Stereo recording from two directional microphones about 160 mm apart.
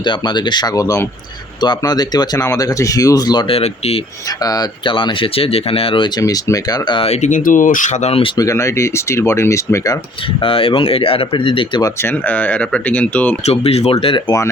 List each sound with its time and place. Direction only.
0.0 s speech: 30° left (ahead or behind)
3.6 s speech: 40° left (ahead or behind)
4.4 s speech: 25° left (ahead or behind)
8.4 s speech: 20° left (ahead or behind)
10.4 s speech: 35° left (ahead or behind)
12.0 s speech: 10° left (ahead or behind)
13.4 s speech: 40° left (ahead or behind)